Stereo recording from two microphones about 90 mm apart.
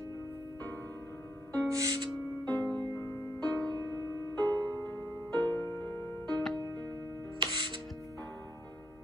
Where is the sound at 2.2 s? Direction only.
20° left (ahead or behind).